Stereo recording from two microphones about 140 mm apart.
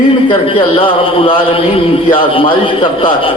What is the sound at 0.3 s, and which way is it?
A man's voice, 40° left (ahead or behind).